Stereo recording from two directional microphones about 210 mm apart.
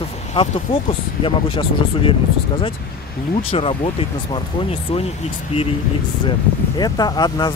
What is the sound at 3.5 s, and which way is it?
Speech, 25° left (ahead or behind).